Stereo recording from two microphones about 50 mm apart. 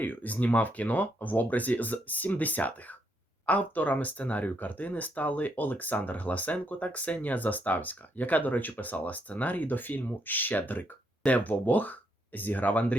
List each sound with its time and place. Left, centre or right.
0.0 s speech: left